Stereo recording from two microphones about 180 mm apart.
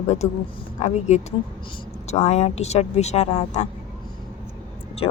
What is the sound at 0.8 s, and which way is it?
Speech, 40° left (ahead or behind).